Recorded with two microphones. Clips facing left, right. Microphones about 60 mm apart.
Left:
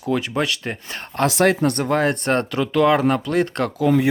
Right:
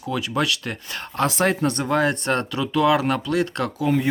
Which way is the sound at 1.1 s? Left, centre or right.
Left.